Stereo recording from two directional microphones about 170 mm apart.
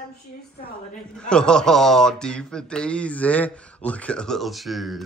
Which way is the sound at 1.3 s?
5° left (ahead or behind).